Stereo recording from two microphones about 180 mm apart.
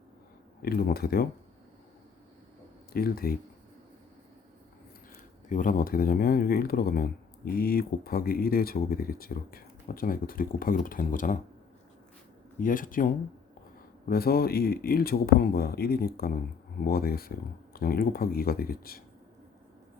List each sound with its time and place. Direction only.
0.6 s speech: 60° left (ahead or behind)
2.9 s speech: 55° left (ahead or behind)
5.5 s speech: 45° left (ahead or behind)
12.5 s speech: 50° left (ahead or behind)